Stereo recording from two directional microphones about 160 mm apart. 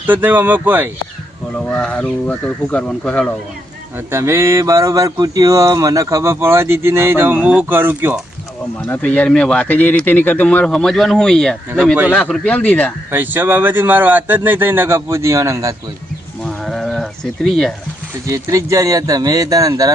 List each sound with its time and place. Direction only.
0.0 s speech: 10° right (ahead or behind)
1.5 s speech: 5° left (ahead or behind)
3.9 s speech: 15° right (ahead or behind)
8.9 s speech: 10° left (ahead or behind)
13.1 s speech: 10° right (ahead or behind)
16.4 s sheep: centre (ahead or behind)
18.3 s speech: 20° right (ahead or behind)